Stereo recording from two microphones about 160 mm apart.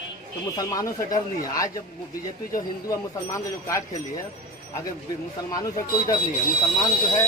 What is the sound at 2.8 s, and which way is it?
Speech, 20° left (ahead or behind).